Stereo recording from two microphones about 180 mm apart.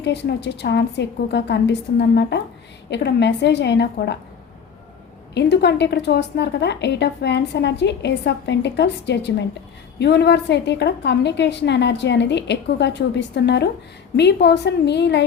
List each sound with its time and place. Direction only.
0.0 s a woman's voice: 75° left (ahead or behind)
5.3 s a woman's voice: 70° left (ahead or behind)